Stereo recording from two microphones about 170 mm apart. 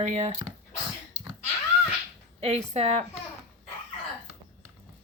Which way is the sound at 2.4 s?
40° right (ahead or behind).